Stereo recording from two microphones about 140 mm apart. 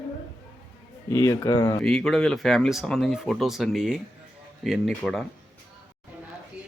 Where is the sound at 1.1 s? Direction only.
20° left (ahead or behind).